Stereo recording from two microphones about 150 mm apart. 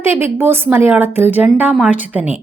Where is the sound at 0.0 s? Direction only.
15° right (ahead or behind).